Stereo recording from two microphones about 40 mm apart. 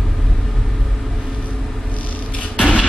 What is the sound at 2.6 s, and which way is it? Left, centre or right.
Music, left.